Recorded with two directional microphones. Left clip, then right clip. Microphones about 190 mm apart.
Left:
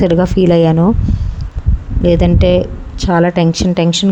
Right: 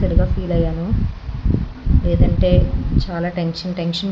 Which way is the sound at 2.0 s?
60° left (ahead or behind).